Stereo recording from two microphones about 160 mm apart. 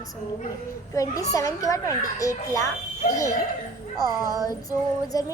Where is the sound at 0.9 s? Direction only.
20° left (ahead or behind).